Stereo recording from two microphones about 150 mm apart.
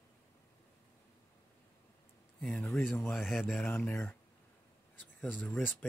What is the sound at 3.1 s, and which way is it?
Speech, centre (ahead or behind).